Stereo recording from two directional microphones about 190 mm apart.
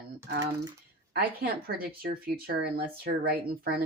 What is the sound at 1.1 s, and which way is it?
Speech, 55° right (ahead or behind).